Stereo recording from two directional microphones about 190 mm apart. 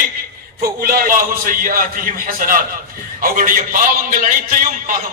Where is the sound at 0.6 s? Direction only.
50° right (ahead or behind).